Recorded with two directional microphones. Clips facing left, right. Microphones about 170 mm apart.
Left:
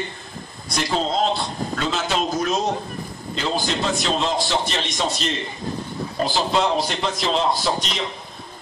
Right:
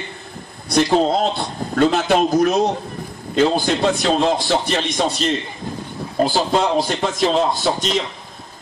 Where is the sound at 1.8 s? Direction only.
55° right (ahead or behind).